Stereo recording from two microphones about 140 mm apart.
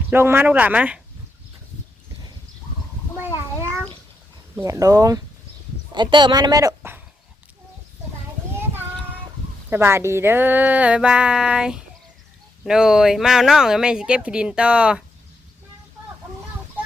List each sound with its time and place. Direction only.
0.1 s speech: 15° right (ahead or behind)
4.5 s speech: 25° right (ahead or behind)
8.5 s child singing: 15° right (ahead or behind)
9.6 s speech: 15° right (ahead or behind)